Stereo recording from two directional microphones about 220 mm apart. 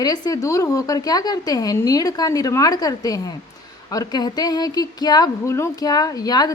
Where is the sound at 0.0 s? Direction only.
15° left (ahead or behind).